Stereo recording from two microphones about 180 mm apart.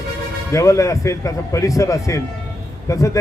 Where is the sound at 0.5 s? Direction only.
15° left (ahead or behind).